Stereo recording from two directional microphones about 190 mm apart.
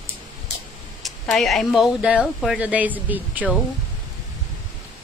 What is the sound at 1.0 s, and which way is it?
Speech, centre (ahead or behind).